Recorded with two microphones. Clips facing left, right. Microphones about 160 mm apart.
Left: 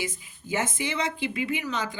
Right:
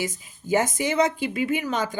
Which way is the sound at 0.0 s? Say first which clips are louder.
Right 4 dB; 45° right (ahead or behind).